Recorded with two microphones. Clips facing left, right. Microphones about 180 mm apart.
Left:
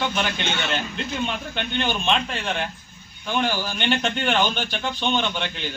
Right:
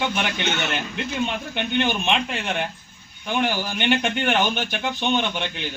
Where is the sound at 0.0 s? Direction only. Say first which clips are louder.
Even; 15° right (ahead or behind).